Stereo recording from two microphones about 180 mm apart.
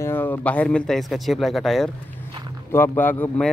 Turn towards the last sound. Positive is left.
turn(degrees=10)  # may be behind; listen again after turning